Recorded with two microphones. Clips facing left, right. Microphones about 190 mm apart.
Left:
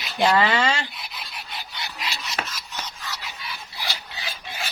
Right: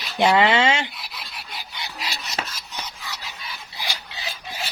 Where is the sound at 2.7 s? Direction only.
15° right (ahead or behind).